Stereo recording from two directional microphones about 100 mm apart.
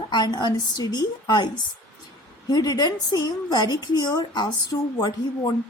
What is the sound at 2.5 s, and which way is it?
A woman's voice, 40° left (ahead or behind).